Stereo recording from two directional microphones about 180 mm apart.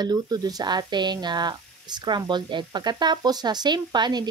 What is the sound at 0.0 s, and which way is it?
Speech, 20° right (ahead or behind).